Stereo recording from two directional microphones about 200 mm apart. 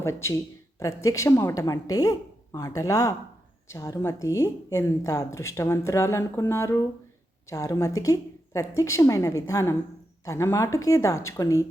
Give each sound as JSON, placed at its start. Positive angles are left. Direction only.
{"t": 0.0, "sound": "a woman's voice", "side_deg": 15}